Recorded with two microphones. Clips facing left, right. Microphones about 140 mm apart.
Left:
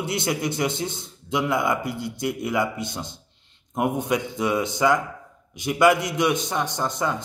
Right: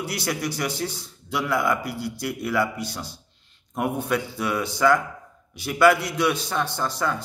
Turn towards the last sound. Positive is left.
turn(degrees=20)  # may be behind; listen again after turning